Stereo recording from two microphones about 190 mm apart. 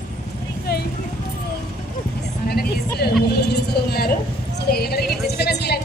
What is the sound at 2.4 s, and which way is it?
Vehicle, 55° left (ahead or behind).